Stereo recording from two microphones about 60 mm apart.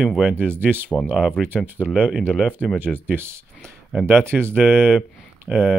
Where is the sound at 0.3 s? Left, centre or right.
Right.